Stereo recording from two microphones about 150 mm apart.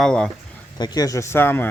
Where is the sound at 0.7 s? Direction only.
25° left (ahead or behind).